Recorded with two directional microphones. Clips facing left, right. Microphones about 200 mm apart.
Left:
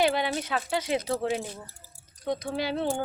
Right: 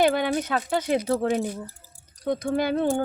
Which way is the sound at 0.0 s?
50° right (ahead or behind).